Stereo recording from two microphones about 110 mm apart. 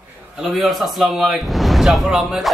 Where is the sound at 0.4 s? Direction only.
Centre (ahead or behind).